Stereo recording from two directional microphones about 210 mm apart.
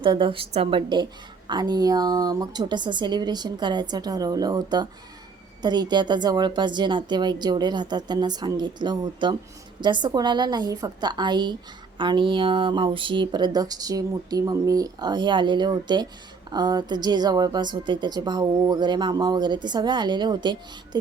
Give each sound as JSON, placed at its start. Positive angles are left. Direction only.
{"t": 0.0, "sound": "a woman's voice", "side_deg": -25}